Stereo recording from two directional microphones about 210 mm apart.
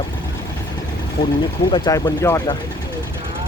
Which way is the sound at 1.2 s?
50° left (ahead or behind).